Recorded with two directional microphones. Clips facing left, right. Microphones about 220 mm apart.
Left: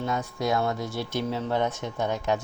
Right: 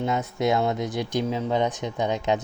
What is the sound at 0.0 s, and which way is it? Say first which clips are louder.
Speech: right 4 dB; 20° right (ahead or behind).